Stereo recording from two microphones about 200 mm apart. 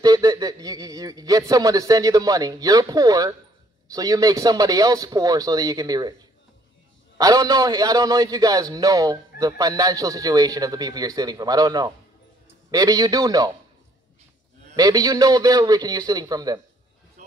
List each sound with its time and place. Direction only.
0.0 s a man's voice: 20° right (ahead or behind)
7.2 s a man's voice: 20° right (ahead or behind)
14.8 s a man's voice: 20° right (ahead or behind)